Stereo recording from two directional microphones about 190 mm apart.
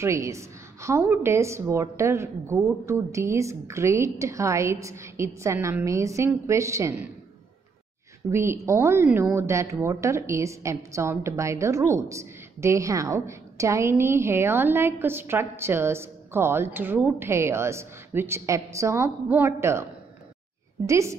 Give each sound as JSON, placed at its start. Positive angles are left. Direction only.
{"t": 0.0, "sound": "a woman's voice", "side_deg": -15}
{"t": 8.3, "sound": "a woman's voice", "side_deg": -15}